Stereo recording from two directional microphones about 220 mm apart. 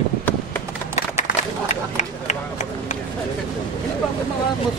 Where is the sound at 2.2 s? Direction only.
35° left (ahead or behind).